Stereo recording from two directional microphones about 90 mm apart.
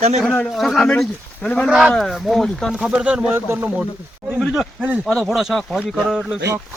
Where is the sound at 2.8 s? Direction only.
10° right (ahead or behind).